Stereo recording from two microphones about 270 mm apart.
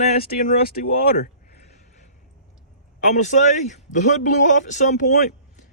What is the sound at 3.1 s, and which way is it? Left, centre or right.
Speech, left.